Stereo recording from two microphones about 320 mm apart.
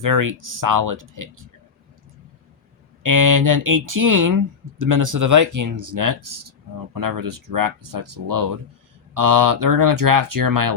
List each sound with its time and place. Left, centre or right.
0.0 s speech: right
3.0 s speech: right
6.9 s speech: right